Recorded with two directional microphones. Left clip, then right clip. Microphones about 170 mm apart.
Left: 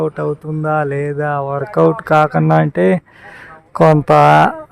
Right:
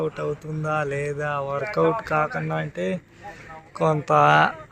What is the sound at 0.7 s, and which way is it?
Mantra, 50° left (ahead or behind).